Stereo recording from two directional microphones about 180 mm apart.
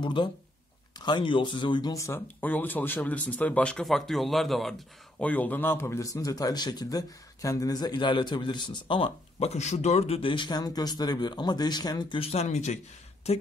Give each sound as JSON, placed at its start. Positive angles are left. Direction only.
{"t": 0.0, "sound": "speech", "side_deg": 25}